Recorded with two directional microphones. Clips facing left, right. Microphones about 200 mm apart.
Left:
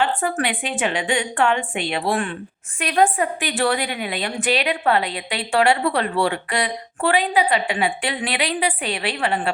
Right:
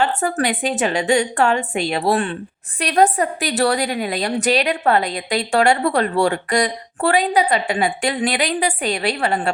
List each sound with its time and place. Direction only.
0.2 s a woman's voice: 40° right (ahead or behind)